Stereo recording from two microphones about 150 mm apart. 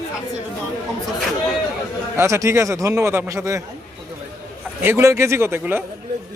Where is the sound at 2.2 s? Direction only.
20° right (ahead or behind).